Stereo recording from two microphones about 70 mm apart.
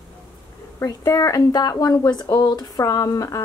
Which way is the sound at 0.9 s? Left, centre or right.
Left.